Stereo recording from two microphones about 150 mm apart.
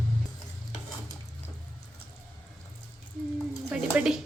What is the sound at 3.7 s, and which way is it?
Speech, 5° right (ahead or behind).